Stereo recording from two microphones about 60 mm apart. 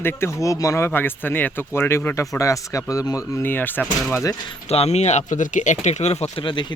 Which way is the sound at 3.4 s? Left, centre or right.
Left.